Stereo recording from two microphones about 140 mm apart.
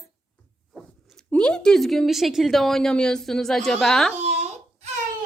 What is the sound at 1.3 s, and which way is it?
A woman's voice, 5° left (ahead or behind).